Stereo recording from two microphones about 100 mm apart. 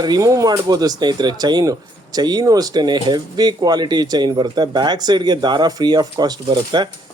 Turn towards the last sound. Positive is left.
turn(degrees=-50)  # may be behind; listen again after turning